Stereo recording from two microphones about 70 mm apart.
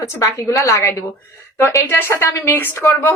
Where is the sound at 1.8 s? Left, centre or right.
Left.